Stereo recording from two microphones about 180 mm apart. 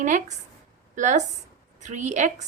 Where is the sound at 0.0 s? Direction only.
45° right (ahead or behind).